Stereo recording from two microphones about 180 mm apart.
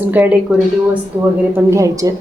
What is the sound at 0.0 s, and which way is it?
Speech, 10° right (ahead or behind).